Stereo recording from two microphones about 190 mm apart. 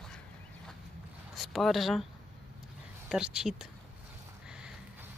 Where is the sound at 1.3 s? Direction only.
Centre (ahead or behind).